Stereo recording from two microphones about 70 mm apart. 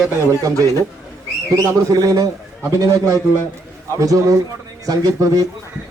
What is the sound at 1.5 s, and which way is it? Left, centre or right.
Speech, right.